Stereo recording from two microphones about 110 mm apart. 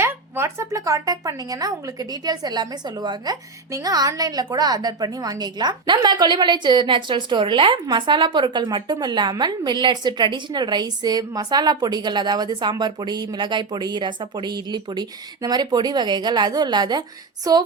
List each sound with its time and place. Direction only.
0.0 s speech: 25° right (ahead or behind)